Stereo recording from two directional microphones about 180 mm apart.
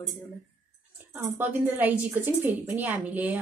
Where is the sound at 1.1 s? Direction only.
10° right (ahead or behind).